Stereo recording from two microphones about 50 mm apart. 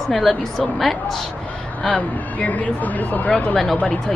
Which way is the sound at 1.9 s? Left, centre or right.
Left.